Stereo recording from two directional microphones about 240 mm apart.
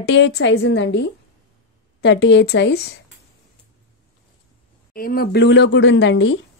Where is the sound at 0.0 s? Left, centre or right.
Left.